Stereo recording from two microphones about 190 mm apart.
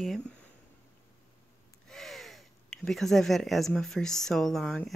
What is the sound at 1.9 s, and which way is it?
Speech, centre (ahead or behind).